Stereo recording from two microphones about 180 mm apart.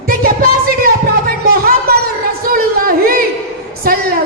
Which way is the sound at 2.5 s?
55° right (ahead or behind).